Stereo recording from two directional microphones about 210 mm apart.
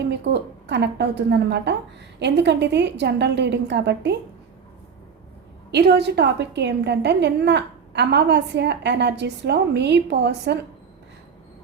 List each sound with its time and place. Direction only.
0.0 s a woman's voice: 55° right (ahead or behind)
5.7 s a woman's voice: 55° right (ahead or behind)